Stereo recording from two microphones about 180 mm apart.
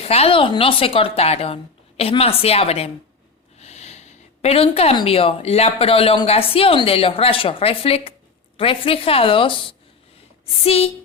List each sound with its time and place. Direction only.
0.0 s a woman's voice: 35° left (ahead or behind)